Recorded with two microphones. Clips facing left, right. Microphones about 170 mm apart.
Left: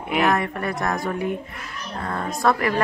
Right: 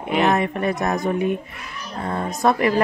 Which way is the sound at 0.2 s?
20° right (ahead or behind).